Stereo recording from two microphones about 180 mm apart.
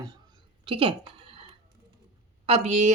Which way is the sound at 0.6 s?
30° right (ahead or behind).